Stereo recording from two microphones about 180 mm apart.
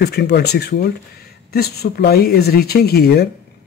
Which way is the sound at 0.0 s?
65° left (ahead or behind).